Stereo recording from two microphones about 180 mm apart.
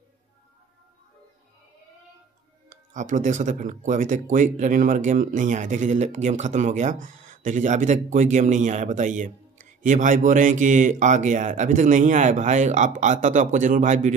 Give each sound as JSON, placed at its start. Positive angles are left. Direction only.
{"t": 2.7, "sound": "speech", "side_deg": -45}